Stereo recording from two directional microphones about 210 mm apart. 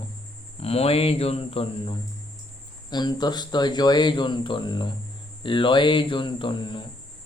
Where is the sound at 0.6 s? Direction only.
30° left (ahead or behind).